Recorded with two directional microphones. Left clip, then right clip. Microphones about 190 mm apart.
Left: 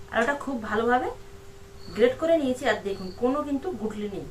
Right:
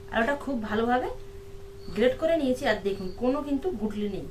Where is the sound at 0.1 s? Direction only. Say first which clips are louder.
Left 1 dB; 20° right (ahead or behind).